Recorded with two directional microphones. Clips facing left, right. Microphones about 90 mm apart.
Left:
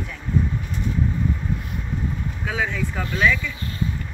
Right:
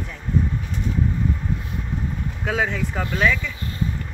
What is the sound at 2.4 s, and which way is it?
Speech, 55° right (ahead or behind).